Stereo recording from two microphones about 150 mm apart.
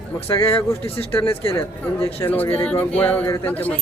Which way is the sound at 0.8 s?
40° left (ahead or behind).